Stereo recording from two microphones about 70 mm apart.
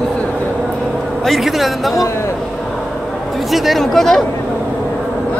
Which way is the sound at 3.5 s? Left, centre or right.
Centre.